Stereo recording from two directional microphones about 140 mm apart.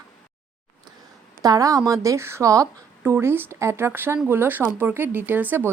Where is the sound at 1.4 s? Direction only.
25° right (ahead or behind).